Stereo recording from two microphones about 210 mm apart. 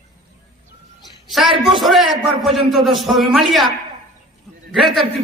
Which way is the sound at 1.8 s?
Centre (ahead or behind).